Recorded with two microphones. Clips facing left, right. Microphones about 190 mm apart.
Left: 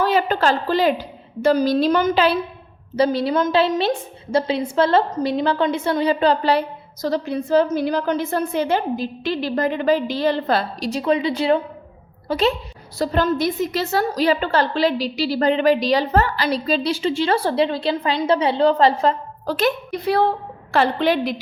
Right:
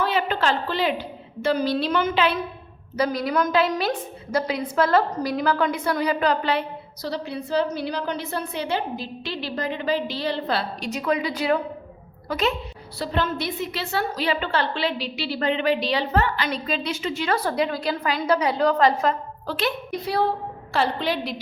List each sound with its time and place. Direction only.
0.0 s a woman's voice: 40° left (ahead or behind)
10.8 s a woman's voice: 30° left (ahead or behind)
13.0 s a woman's voice: 40° left (ahead or behind)
19.5 s a woman's voice: 50° left (ahead or behind)